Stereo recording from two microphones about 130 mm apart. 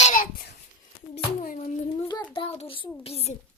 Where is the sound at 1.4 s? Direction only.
80° left.